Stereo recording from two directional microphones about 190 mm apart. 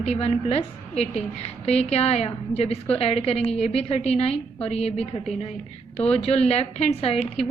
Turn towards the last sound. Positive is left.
turn(degrees=30)  # may be behind; listen again after turning